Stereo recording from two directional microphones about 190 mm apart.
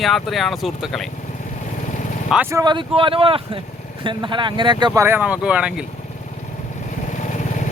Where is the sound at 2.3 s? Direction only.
10° right (ahead or behind).